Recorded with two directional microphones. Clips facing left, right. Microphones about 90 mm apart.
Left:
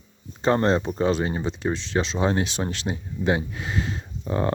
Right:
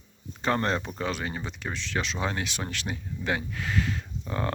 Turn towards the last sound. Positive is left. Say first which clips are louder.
# left 6 dB
turn(degrees=25)  # may be behind; listen again after turning